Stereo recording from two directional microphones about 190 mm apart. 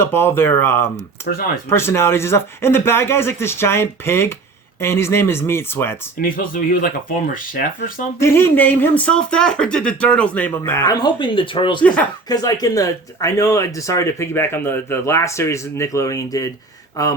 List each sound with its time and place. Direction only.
0.0 s speech: 10° left (ahead or behind)
6.2 s speech: 50° left (ahead or behind)
8.2 s speech: 10° left (ahead or behind)